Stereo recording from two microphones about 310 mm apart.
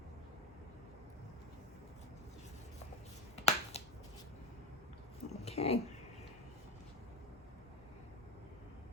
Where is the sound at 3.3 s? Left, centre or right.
Centre.